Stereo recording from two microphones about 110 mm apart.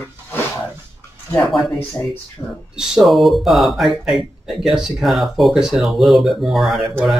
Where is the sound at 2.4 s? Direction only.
30° left (ahead or behind).